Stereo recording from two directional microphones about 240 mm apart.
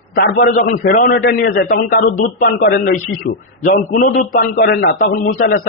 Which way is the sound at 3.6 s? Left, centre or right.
Left.